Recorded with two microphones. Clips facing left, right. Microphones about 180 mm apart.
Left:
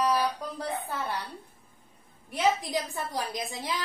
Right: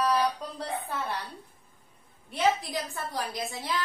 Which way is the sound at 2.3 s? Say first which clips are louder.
Even; 15° left (ahead or behind).